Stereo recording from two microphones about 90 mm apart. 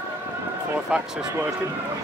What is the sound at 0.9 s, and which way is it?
Speech, 15° right (ahead or behind).